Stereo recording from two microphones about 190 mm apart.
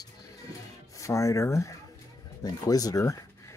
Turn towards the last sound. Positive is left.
turn(degrees=15)  # may be behind; listen again after turning